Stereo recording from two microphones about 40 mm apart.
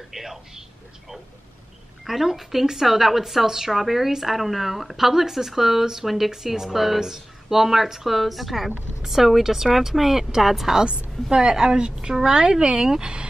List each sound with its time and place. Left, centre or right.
0.1 s speech: centre
2.0 s a woman's voice: centre